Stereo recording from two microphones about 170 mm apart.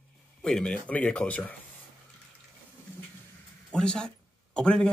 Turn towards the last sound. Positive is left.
turn(degrees=5)  # may be behind; listen again after turning